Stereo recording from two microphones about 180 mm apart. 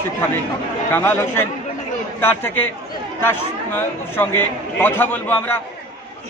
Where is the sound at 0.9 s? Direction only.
10° left (ahead or behind).